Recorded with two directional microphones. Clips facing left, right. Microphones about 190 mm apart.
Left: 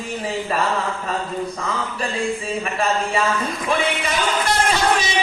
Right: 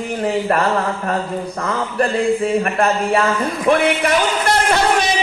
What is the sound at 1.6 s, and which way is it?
A man's voice, 60° right (ahead or behind).